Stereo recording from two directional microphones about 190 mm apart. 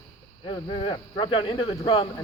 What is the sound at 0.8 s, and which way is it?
Speech, 25° left (ahead or behind).